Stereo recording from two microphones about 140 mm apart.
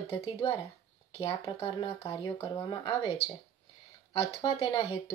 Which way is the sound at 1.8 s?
30° left (ahead or behind).